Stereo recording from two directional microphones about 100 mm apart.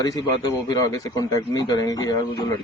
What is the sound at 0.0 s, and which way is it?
Speech, 40° left (ahead or behind).